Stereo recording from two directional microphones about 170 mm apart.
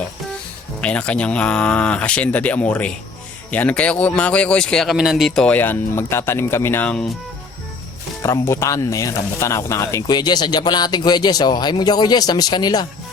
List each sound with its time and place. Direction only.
0.8 s a man's voice: 5° left (ahead or behind)
8.2 s speech: 15° left (ahead or behind)